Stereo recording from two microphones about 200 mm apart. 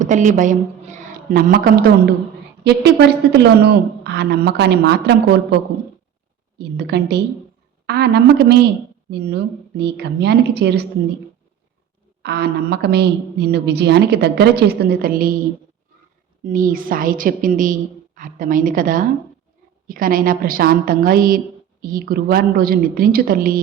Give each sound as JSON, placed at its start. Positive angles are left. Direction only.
{"t": 0.0, "sound": "a woman's voice", "side_deg": -40}
{"t": 6.6, "sound": "a woman's voice", "side_deg": -55}
{"t": 12.2, "sound": "a woman's voice", "side_deg": -55}
{"t": 16.5, "sound": "a woman's voice", "side_deg": -45}